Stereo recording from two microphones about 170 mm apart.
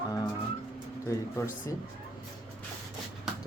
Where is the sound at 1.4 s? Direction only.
20° left (ahead or behind).